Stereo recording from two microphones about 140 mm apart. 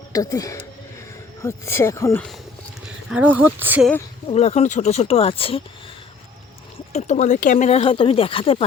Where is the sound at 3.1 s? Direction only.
10° right (ahead or behind).